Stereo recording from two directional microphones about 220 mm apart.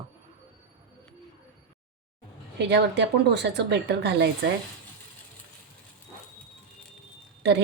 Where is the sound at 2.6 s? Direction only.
50° right (ahead or behind).